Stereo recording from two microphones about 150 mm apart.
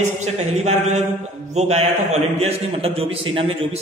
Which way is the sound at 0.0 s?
50° right (ahead or behind).